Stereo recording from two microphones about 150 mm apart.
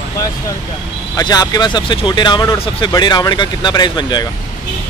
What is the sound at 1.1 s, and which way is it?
Speech, 25° left (ahead or behind).